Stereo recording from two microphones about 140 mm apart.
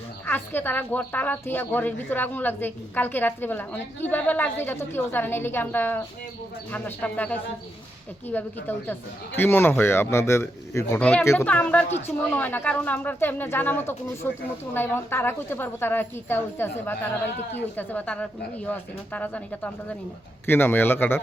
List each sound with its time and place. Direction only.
0.3 s a woman's voice: 15° left (ahead or behind)
11.0 s a woman's voice: 5° left (ahead or behind)